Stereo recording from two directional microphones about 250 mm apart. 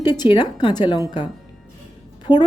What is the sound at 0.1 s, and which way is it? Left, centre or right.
Speech, centre.